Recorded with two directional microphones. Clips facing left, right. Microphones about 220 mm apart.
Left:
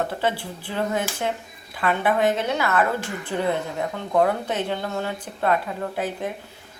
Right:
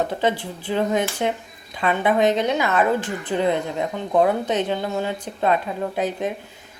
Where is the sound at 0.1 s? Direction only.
15° right (ahead or behind).